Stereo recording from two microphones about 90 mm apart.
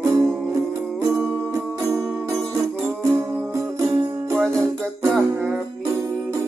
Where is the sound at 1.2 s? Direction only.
15° left (ahead or behind).